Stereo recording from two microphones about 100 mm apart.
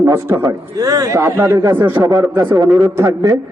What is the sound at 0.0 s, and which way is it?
Speech, 25° right (ahead or behind).